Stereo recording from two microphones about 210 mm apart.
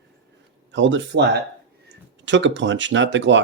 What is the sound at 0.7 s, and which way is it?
Speech, 60° right (ahead or behind).